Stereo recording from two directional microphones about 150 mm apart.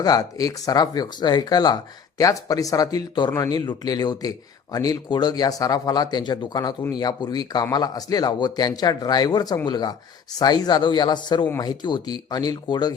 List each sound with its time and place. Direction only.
0.0 s speech: 25° left (ahead or behind)